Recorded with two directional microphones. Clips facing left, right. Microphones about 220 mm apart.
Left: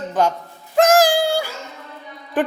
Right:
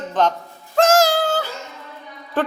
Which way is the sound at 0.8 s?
15° left (ahead or behind).